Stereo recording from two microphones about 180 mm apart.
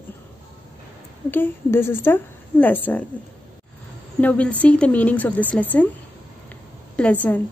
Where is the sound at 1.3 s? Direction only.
10° left (ahead or behind).